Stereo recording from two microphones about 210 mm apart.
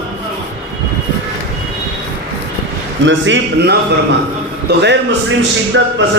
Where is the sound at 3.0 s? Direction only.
55° right (ahead or behind).